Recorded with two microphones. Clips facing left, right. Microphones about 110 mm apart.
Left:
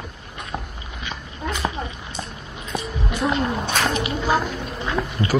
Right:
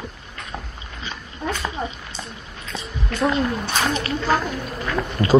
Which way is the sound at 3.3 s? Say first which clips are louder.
Even; 25° left (ahead or behind).